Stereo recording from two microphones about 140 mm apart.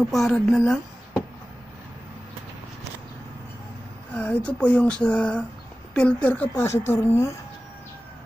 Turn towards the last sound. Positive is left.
turn(degrees=20)  # may be behind; listen again after turning